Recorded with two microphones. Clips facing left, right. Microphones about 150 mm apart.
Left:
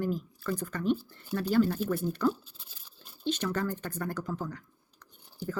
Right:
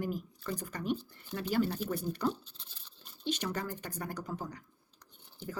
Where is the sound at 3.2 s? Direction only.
15° right (ahead or behind).